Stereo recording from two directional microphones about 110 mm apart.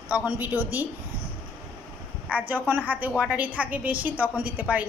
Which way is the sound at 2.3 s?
15° right (ahead or behind).